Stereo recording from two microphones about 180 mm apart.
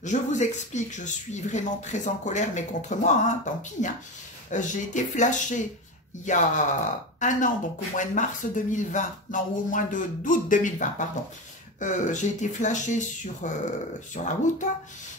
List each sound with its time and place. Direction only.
0.0 s speech: 40° left (ahead or behind)
4.5 s speech: 45° left (ahead or behind)